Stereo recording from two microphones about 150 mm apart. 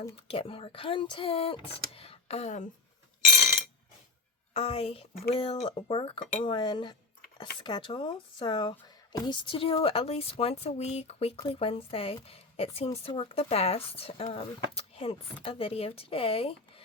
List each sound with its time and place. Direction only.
0.2 s speech: 35° left (ahead or behind)
4.5 s a woman's voice: 45° left (ahead or behind)